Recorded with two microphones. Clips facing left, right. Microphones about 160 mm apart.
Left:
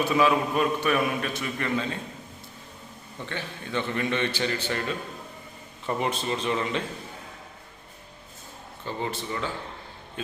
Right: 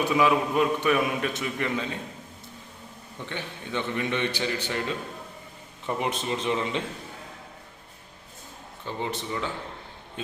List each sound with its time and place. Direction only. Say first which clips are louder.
0.1 s a man's voice: even; 15° right (ahead or behind)
3.2 s a man's voice: even; 15° right (ahead or behind)
8.8 s a man's voice: even; 15° right (ahead or behind)